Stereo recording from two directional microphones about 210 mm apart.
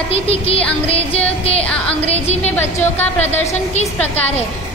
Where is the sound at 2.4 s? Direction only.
10° left (ahead or behind).